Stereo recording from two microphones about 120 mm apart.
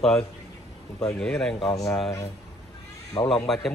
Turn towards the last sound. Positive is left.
turn(degrees=0)  # may be behind; listen again after turning